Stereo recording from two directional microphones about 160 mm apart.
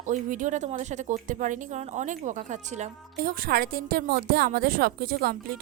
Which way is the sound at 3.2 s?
70° right (ahead or behind).